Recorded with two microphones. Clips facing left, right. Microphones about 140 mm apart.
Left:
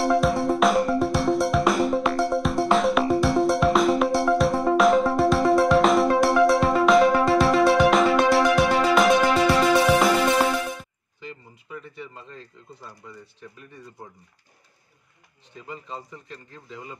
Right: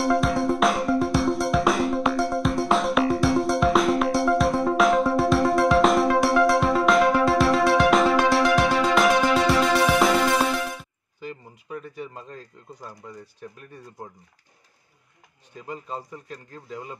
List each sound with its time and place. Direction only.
0.0 s music: centre (ahead or behind)
11.7 s a sound: 45° right (ahead or behind)
15.5 s a man's voice: 40° right (ahead or behind)